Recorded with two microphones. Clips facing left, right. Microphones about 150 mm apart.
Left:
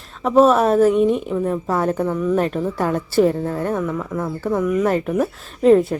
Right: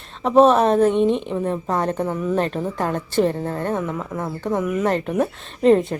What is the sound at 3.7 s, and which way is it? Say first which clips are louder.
Speech: left 2 dB; 15° right (ahead or behind).